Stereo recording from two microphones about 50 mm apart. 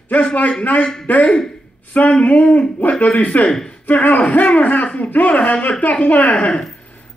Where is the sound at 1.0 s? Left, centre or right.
Left.